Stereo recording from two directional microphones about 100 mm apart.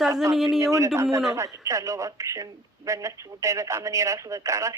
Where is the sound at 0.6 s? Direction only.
30° right (ahead or behind).